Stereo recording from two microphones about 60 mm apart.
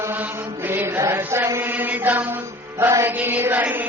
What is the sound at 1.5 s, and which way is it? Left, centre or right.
Chant, right.